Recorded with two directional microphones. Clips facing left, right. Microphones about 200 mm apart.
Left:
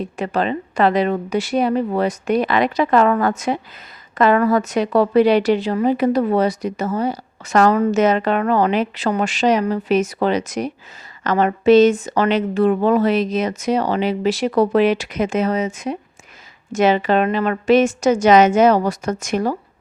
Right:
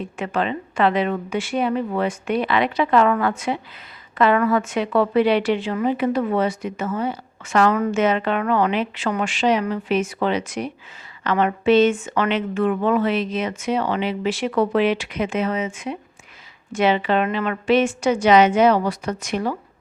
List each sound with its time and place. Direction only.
0.0 s a woman's voice: 40° left (ahead or behind)